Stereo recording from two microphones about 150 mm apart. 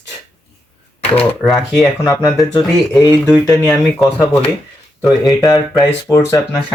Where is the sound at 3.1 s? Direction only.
5° left (ahead or behind).